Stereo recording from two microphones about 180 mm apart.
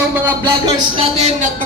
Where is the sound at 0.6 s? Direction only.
35° right (ahead or behind).